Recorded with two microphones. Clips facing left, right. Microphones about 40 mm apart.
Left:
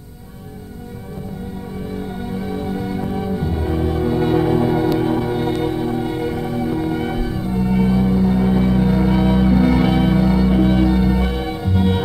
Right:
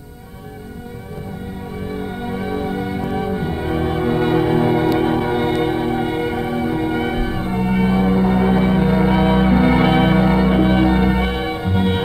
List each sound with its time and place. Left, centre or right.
2.1 s music: right